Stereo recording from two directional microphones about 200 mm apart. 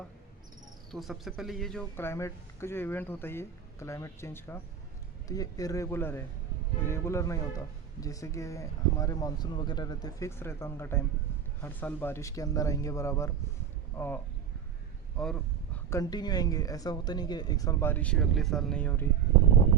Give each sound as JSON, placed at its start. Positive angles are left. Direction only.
{"t": 0.9, "sound": "speech", "side_deg": 0}
{"t": 15.2, "sound": "a sound", "side_deg": 5}
{"t": 15.9, "sound": "speech", "side_deg": 20}